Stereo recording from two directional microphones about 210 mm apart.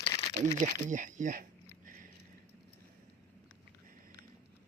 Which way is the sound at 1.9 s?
40° right (ahead or behind).